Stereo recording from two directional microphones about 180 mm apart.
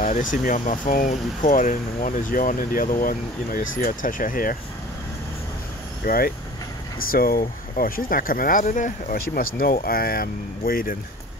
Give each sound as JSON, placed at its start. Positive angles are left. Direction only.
{"t": 0.0, "sound": "speech", "side_deg": 45}
{"t": 6.0, "sound": "speech", "side_deg": 55}